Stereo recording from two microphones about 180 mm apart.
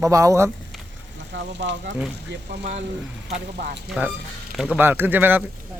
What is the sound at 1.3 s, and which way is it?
Speech, 70° right (ahead or behind).